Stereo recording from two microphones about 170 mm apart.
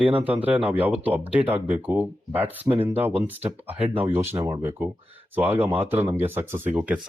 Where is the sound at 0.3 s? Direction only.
10° right (ahead or behind).